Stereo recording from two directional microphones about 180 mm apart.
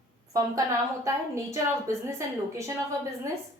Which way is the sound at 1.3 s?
15° right (ahead or behind).